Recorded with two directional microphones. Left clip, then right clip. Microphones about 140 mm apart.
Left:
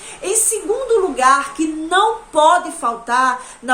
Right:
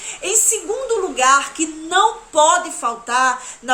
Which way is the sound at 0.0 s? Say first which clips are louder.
Right 1 dB; 10° right (ahead or behind).